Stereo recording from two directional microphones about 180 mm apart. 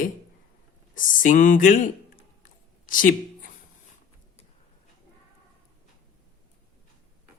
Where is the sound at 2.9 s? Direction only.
50° left (ahead or behind).